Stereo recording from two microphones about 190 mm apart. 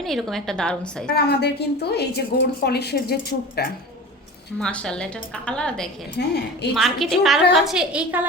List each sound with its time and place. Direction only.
0.0 s a woman's voice: centre (ahead or behind)
1.1 s a woman's voice: 55° left (ahead or behind)
4.6 s a woman's voice: 5° left (ahead or behind)
6.1 s a woman's voice: 60° left (ahead or behind)
6.7 s a woman's voice: centre (ahead or behind)